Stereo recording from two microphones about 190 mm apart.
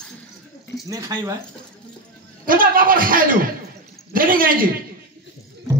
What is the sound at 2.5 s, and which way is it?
A man's voice, 45° right (ahead or behind).